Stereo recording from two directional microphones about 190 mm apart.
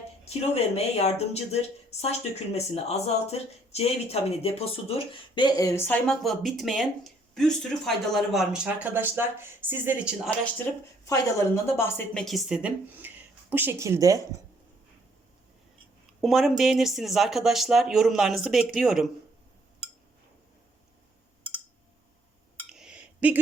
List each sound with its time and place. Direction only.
0.3 s speech: 35° left (ahead or behind); by 10.2 s 10° right (ahead or behind)
11.0 s speech: 15° left (ahead or behind); by 14.3 s 20° right (ahead or behind)
16.2 s speech: centre (ahead or behind)
22.7 s a sound: 5° right (ahead or behind)